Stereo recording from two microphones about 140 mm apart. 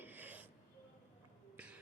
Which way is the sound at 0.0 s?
15° right (ahead or behind).